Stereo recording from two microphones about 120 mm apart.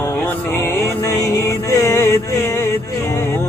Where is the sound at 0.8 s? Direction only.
25° left (ahead or behind).